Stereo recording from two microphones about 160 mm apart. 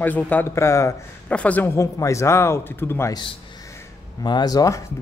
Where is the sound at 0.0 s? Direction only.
10° left (ahead or behind).